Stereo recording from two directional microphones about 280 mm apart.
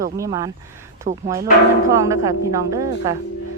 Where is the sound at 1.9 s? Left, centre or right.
Centre.